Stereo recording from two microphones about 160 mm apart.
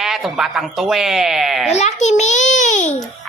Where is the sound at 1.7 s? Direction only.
45° left (ahead or behind).